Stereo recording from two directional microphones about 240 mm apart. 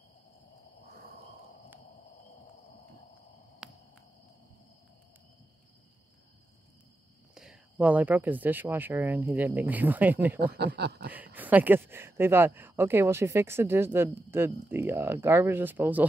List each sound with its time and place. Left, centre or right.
7.3 s speech: centre
10.4 s speech: right
11.3 s speech: centre